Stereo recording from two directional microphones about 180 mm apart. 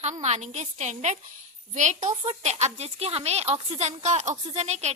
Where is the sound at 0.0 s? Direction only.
40° right (ahead or behind).